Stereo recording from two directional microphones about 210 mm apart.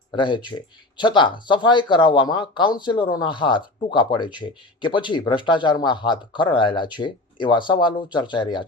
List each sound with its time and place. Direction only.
0.1 s speech: 20° left (ahead or behind)